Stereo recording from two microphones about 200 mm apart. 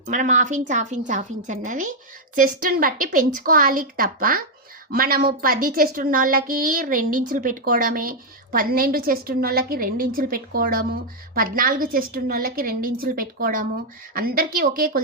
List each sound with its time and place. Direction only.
0.0 s a woman's voice: 40° right (ahead or behind)